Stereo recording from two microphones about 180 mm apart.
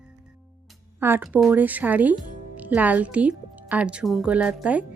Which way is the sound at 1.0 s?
10° right (ahead or behind).